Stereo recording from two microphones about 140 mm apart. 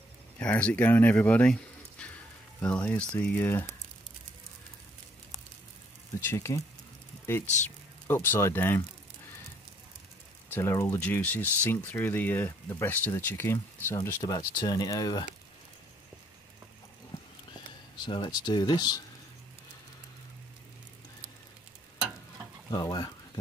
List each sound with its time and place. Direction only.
0.4 s speech: 10° left (ahead or behind)
6.2 s speech: 20° left (ahead or behind)
7.4 s speech: 55° left (ahead or behind)
8.1 s speech: 15° left (ahead or behind)
10.5 s speech: 20° left (ahead or behind)
18.0 s speech: 35° left (ahead or behind)
22.7 s speech: 30° left (ahead or behind)